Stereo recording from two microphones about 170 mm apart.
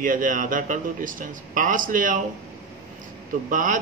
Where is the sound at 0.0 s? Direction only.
50° right (ahead or behind).